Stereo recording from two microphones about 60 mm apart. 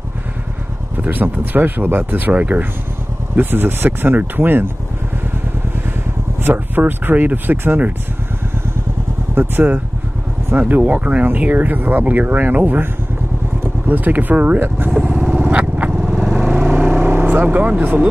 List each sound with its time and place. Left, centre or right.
0.9 s speech: right
6.4 s speech: right
9.3 s speech: right
10.8 s speech: right
15.0 s vehicle: right